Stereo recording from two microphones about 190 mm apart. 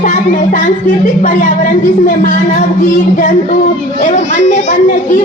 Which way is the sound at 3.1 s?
45° left (ahead or behind).